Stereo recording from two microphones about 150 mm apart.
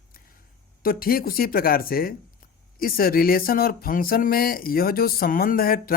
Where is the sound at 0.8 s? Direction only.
75° left (ahead or behind).